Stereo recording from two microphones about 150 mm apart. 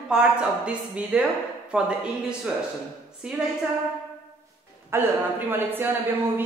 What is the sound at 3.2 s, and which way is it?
Speech, 5° right (ahead or behind).